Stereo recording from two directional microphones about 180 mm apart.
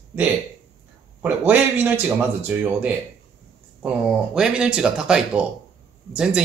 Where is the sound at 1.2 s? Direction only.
10° right (ahead or behind).